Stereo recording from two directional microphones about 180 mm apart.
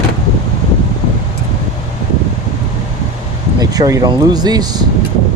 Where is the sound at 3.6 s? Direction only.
20° right (ahead or behind).